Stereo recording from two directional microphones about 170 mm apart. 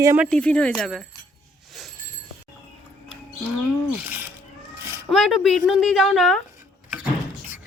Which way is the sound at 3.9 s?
10° right (ahead or behind).